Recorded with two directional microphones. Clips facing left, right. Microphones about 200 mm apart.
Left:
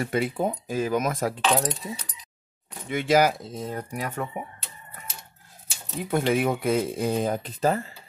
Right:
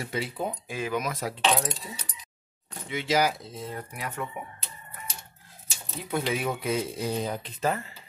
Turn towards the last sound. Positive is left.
turn(degrees=35)  # may be behind; listen again after turning